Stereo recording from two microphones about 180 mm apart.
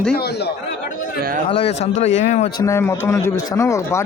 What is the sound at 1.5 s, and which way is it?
Speech, 35° left (ahead or behind).